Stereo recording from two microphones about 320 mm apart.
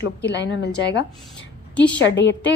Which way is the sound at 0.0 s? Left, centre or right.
Left.